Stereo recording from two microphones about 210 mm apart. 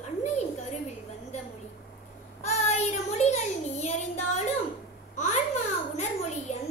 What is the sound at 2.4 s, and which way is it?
Child singing, 30° left (ahead or behind).